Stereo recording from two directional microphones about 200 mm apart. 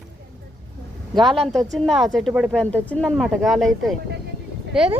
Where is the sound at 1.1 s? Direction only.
25° right (ahead or behind).